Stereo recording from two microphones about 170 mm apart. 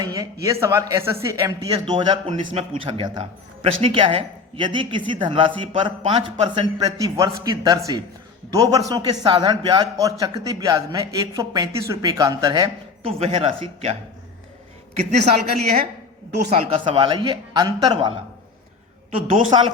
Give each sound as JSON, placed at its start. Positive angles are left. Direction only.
{"t": 0.0, "sound": "a man's voice", "side_deg": -20}
{"t": 14.9, "sound": "a man's voice", "side_deg": -40}
{"t": 19.5, "sound": "a man's voice", "side_deg": -25}